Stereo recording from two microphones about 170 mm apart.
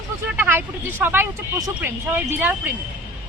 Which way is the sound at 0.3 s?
10° right (ahead or behind).